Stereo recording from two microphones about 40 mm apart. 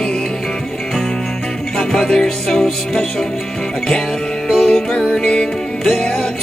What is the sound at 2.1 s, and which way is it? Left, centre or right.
Music, centre.